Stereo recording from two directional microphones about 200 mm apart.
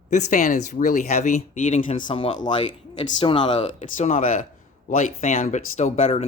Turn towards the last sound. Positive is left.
turn(degrees=30)  # may be behind; listen again after turning